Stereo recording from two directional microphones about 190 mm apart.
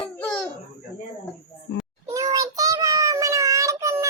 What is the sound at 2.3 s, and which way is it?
Child singing, 20° right (ahead or behind).